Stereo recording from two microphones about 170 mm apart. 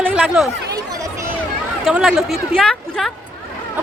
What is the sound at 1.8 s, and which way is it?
Speech, 5° right (ahead or behind).